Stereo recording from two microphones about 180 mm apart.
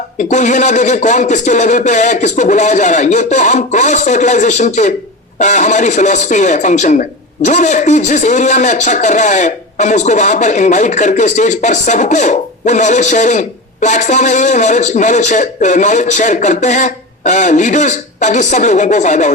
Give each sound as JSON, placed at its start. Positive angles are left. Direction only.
{"t": 0.2, "sound": "a man's voice", "side_deg": 40}